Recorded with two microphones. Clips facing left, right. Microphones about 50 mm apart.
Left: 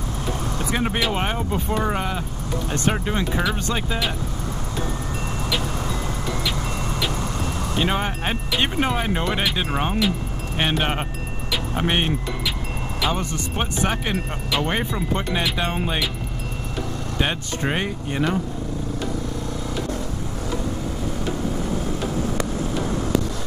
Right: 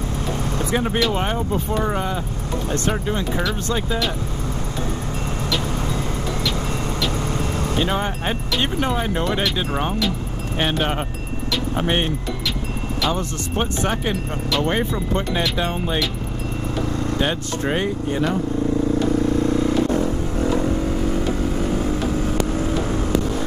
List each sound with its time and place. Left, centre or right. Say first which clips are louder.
0.8 s speech: right 2 dB; centre
7.8 s speech: left 1 dB; centre
17.2 s speech: left 2 dB; centre
19.4 s vehicle: right 9 dB; right